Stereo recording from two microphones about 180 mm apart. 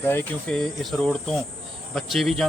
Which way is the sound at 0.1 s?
10° left (ahead or behind).